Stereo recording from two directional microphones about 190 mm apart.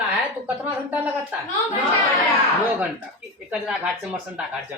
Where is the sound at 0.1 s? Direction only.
10° right (ahead or behind).